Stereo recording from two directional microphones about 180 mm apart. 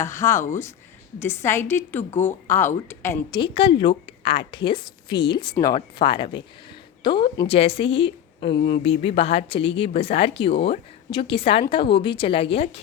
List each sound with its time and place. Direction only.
0.0 s a woman's voice: 15° left (ahead or behind)
3.3 s a woman's voice: 30° left (ahead or behind)